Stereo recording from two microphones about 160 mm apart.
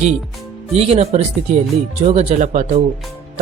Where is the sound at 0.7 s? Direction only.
40° right (ahead or behind).